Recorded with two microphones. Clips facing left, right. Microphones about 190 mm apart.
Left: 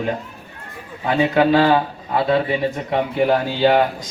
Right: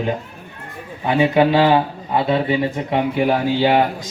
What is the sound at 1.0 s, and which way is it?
Speech, 15° right (ahead or behind).